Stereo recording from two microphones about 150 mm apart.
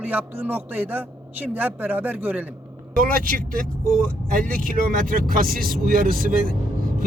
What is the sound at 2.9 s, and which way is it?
Speech, 70° right (ahead or behind).